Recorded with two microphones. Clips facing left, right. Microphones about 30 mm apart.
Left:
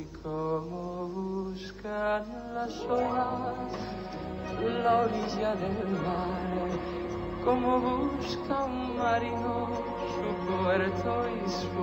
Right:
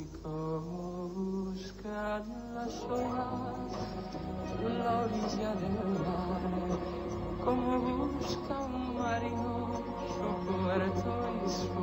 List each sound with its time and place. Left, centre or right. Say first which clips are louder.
2.0 s music: left 7 dB; left
4.6 s music: left 6 dB; left
11.3 s music: left 2 dB; left